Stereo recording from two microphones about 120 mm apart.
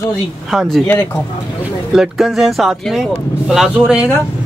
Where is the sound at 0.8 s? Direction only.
20° left (ahead or behind).